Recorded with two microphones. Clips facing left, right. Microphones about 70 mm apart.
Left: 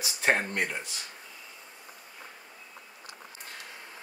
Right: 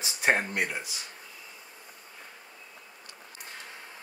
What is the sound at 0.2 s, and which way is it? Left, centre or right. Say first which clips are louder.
Speech: right 1 dB; centre.